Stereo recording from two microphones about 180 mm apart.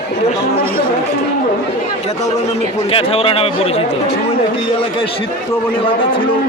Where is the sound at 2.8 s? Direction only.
35° left (ahead or behind).